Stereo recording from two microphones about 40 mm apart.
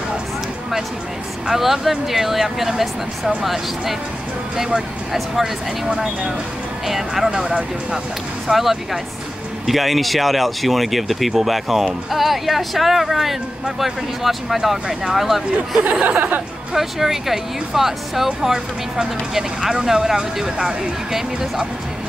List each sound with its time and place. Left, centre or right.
1.5 s speech: centre
5.1 s speech: centre
6.9 s speech: centre
7.2 s speech: centre
8.5 s speech: centre
15.8 s speech: right
16.7 s speech: centre